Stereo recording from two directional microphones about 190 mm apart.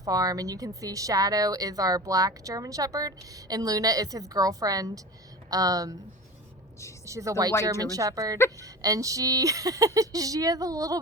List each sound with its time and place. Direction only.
0.0 s speech: 20° right (ahead or behind)
7.0 s speech: 15° right (ahead or behind)